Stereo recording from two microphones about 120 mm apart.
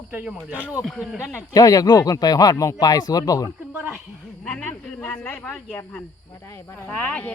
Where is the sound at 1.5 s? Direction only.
30° left (ahead or behind).